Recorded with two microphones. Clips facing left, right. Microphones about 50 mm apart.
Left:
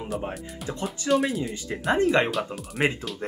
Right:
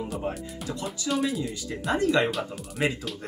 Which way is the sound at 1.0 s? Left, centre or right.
Left.